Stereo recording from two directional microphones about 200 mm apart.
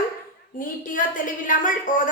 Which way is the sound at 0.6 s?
45° left (ahead or behind).